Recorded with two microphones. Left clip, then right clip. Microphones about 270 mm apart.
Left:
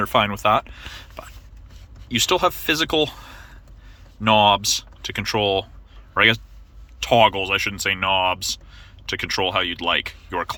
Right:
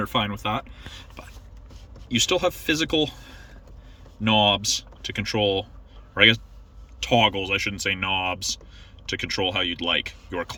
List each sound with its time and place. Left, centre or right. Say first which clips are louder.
0.1 s speech: left 7 dB; centre
2.0 s speech: left 3 dB; centre